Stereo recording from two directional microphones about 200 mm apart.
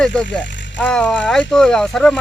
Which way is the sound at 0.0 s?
5° left (ahead or behind).